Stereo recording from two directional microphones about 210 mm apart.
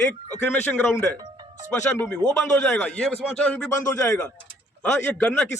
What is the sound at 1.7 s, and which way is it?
A man's voice, 10° left (ahead or behind).